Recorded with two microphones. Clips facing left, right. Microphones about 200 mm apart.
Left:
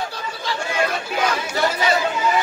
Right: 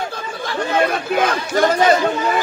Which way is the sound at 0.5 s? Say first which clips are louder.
Right 5 dB; 50° right (ahead or behind).